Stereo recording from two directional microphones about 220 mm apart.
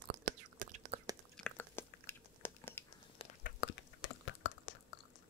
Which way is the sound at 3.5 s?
50° left (ahead or behind).